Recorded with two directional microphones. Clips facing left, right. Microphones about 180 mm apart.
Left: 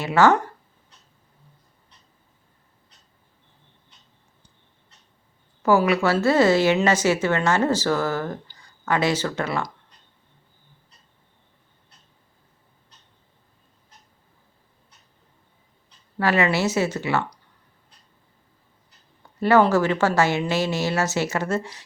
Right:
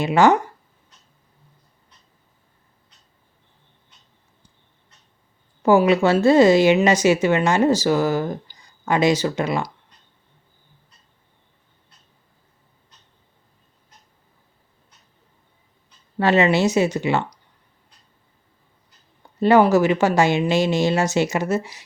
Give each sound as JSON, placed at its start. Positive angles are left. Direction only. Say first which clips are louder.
{"t": 0.0, "sound": "speech", "louder": "right 2 dB", "side_deg": -15}
{"t": 5.6, "sound": "speech", "louder": "right 4 dB", "side_deg": -20}
{"t": 16.1, "sound": "speech", "louder": "right 4 dB", "side_deg": -20}
{"t": 19.4, "sound": "speech", "louder": "right 3 dB", "side_deg": -15}